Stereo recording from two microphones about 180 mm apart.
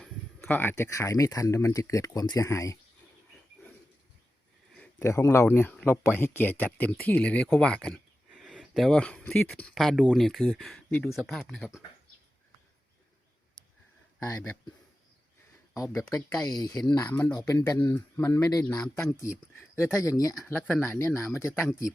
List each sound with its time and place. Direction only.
0.0 s speech: 10° left (ahead or behind)
4.9 s speech: 15° left (ahead or behind); by 11.8 s centre (ahead or behind)
14.3 s speech: 10° left (ahead or behind)
15.9 s speech: 5° left (ahead or behind)
16.6 s speech: 20° left (ahead or behind)
17.3 s speech: 20° left (ahead or behind)
20.5 s speech: 5° left (ahead or behind)